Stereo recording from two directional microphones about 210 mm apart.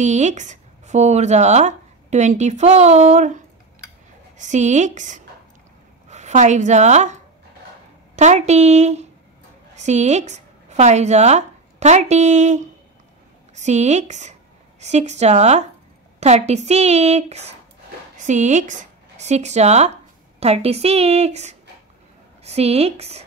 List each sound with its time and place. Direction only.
0.0 s a woman's voice: 35° right (ahead or behind)
8.2 s a woman's voice: 35° right (ahead or behind)